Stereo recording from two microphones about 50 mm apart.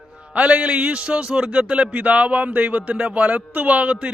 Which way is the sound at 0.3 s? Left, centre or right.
Right.